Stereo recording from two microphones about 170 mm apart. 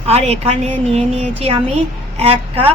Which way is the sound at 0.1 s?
40° right (ahead or behind).